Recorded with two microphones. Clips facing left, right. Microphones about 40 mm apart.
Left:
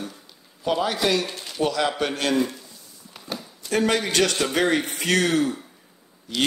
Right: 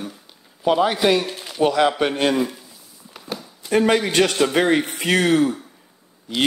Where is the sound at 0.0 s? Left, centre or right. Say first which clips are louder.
Right 2 dB; centre.